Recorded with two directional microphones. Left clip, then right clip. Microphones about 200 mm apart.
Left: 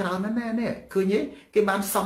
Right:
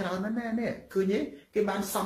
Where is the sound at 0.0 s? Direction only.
10° left (ahead or behind).